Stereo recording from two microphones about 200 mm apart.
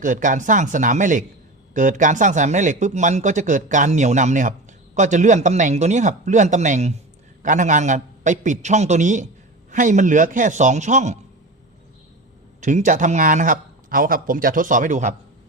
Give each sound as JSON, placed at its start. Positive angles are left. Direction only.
{"t": 0.0, "sound": "speech", "side_deg": -40}
{"t": 12.5, "sound": "speech", "side_deg": -40}